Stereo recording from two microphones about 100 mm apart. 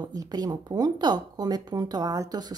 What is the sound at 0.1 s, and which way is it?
A woman's voice, 40° right (ahead or behind).